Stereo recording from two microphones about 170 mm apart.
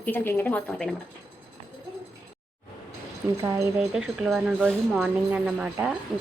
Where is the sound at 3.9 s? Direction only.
Centre (ahead or behind).